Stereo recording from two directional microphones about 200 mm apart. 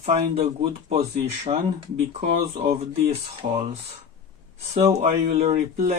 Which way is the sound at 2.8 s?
30° right (ahead or behind).